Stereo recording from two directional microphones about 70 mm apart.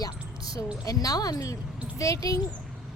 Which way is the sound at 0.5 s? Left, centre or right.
Left.